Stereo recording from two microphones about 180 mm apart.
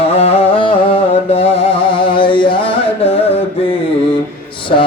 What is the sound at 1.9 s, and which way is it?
Carnatic music, 30° left (ahead or behind).